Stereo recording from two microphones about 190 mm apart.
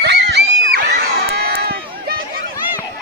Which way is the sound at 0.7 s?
50° right (ahead or behind).